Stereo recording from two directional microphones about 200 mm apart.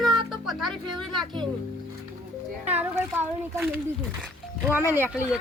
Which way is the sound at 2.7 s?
30° right (ahead or behind).